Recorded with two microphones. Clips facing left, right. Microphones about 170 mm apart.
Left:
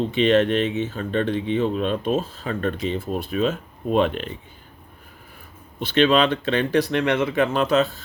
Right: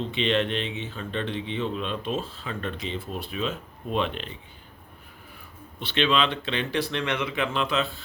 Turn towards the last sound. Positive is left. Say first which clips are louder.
# left 7 dB
turn(degrees=45)  # may be behind; listen again after turning